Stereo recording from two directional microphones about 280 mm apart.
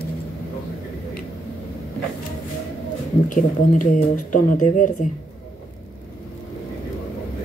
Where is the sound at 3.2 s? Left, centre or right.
Left.